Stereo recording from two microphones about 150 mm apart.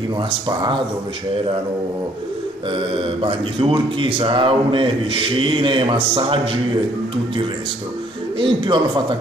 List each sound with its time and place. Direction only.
0.5 s speech: 30° right (ahead or behind)
2.7 s speech: 35° right (ahead or behind)
8.4 s speech: 35° right (ahead or behind)